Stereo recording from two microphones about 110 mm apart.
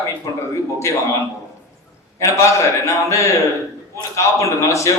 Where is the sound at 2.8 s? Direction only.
25° left (ahead or behind).